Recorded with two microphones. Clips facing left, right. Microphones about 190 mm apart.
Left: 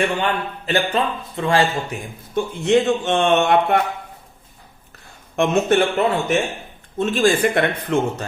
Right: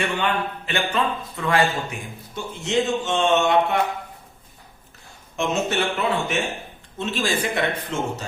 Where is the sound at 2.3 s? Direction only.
55° left (ahead or behind).